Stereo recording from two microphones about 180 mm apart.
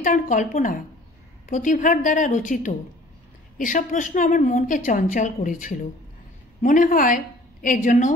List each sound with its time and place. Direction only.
0.0 s a woman's voice: 45° left (ahead or behind)